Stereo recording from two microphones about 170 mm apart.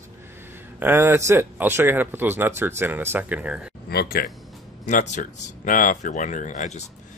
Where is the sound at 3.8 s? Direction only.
65° left (ahead or behind).